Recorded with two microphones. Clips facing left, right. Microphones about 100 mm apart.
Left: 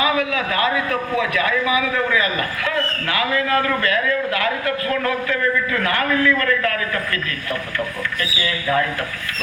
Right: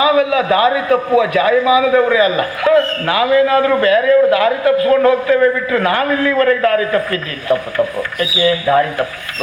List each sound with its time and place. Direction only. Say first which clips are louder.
0.0 s a man's voice: right 7 dB; 25° right (ahead or behind)